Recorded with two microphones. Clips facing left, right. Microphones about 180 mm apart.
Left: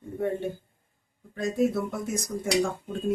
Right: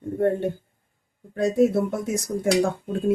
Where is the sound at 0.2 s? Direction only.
60° right (ahead or behind).